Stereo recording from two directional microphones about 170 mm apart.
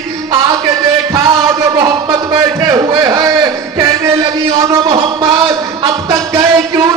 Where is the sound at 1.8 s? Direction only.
20° right (ahead or behind).